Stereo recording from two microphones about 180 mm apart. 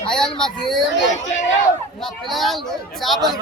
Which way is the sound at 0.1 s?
5° left (ahead or behind).